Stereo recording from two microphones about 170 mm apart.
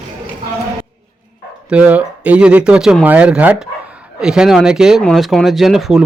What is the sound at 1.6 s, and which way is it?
Speech, 10° right (ahead or behind).